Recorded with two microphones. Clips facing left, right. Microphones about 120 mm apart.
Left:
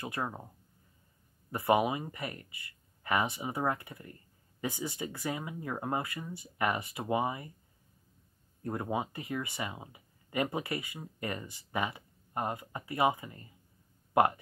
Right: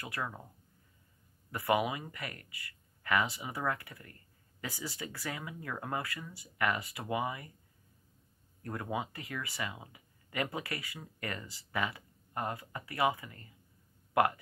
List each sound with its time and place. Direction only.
0.0 s speech: 25° left (ahead or behind)
1.5 s speech: 25° left (ahead or behind)
8.6 s speech: 25° left (ahead or behind)